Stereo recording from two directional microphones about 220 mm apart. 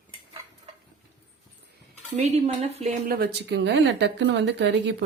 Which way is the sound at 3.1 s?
45° right (ahead or behind).